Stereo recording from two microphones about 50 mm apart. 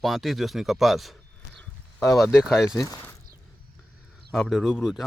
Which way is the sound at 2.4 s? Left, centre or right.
Centre.